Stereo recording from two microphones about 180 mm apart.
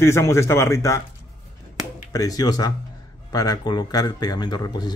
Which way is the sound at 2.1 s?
20° left (ahead or behind).